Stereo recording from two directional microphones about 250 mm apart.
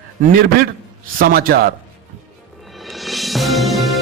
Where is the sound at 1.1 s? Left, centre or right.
Right.